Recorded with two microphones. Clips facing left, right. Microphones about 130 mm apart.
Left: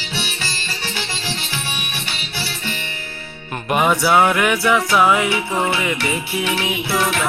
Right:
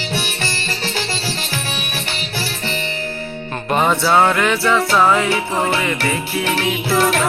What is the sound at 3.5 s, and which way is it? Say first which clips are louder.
Music: even; 10° left (ahead or behind).